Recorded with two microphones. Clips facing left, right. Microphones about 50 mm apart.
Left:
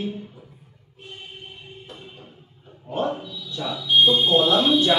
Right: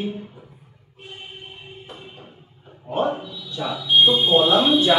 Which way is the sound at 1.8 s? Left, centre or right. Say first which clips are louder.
Right 2 dB; centre.